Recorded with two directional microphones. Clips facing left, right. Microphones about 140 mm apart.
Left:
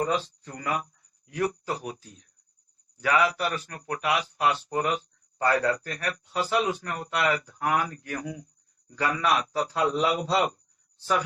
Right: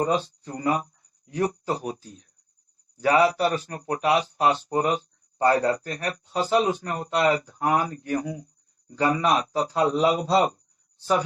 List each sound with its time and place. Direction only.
0.0 s speech: 30° right (ahead or behind)